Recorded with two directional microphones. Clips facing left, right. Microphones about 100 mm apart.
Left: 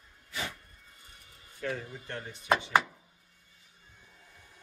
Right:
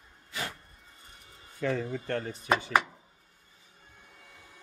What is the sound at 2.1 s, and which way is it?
Speech, 40° right (ahead or behind).